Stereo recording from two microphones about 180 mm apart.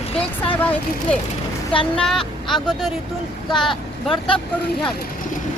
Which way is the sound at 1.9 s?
5° left (ahead or behind).